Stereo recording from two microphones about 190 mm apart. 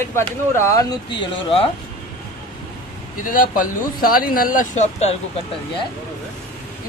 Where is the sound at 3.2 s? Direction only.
45° left (ahead or behind).